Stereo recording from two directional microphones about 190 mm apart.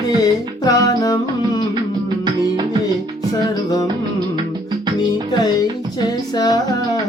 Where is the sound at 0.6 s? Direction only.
20° left (ahead or behind).